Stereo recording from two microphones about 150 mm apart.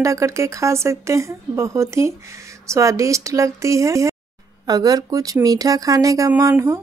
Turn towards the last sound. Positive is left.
turn(degrees=-20)  # may be behind; listen again after turning